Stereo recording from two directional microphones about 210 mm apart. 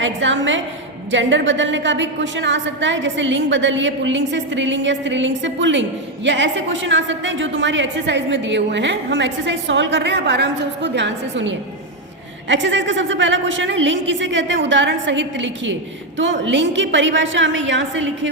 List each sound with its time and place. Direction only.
0.0 s a woman's voice: 65° right (ahead or behind)